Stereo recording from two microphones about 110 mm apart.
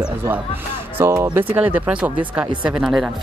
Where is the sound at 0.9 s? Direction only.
25° right (ahead or behind).